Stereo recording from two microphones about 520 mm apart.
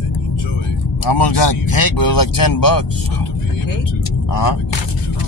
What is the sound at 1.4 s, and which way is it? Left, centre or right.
Speech, left.